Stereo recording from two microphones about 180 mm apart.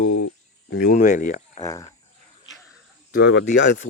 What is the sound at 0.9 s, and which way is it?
Speech, 45° left (ahead or behind).